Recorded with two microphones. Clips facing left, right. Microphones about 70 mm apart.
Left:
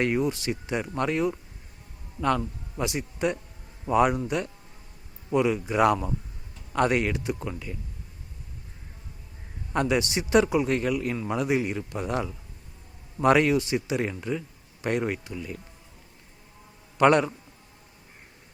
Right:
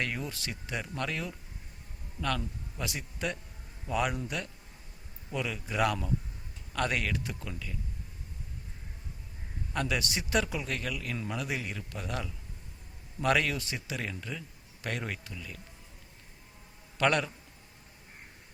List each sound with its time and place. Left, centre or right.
0.0 s a man's voice: left
9.7 s speech: left
17.0 s speech: left